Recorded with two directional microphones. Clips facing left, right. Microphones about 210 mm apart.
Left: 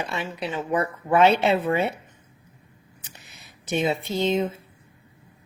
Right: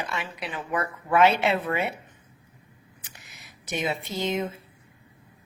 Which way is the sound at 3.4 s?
25° left (ahead or behind).